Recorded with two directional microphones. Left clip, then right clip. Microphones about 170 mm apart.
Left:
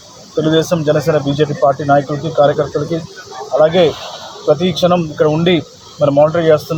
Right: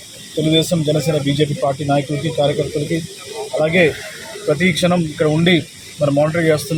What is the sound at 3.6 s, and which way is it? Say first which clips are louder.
Speech: left 4 dB; 5° left (ahead or behind).